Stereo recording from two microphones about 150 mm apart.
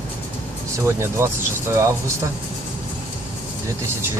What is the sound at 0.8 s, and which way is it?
Speech, 15° right (ahead or behind).